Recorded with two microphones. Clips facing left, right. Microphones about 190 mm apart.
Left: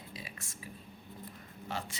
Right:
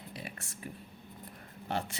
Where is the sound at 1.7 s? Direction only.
60° right (ahead or behind).